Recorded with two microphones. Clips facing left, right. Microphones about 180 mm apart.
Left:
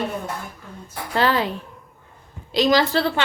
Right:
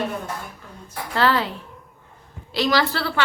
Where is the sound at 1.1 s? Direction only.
15° left (ahead or behind).